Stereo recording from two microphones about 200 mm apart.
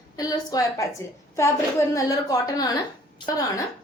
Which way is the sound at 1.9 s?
15° left (ahead or behind).